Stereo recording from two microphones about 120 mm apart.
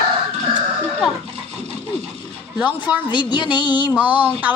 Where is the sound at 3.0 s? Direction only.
40° left (ahead or behind).